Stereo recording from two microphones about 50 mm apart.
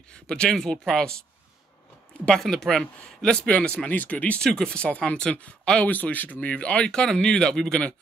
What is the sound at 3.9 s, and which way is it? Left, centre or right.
Speech, left.